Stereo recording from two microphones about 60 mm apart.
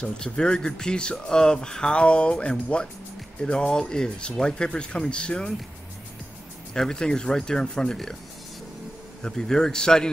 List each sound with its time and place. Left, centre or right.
0.0 s speech: centre
6.7 s speech: centre
9.2 s speech: centre